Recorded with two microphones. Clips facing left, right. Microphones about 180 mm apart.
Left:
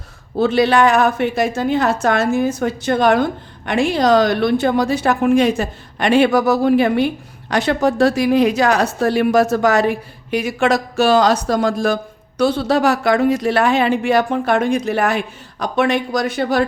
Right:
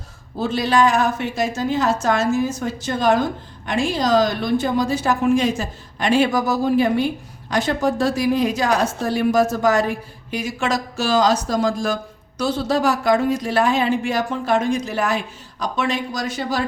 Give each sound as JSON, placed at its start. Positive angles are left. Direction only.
{"t": 0.3, "sound": "a woman's voice", "side_deg": 65}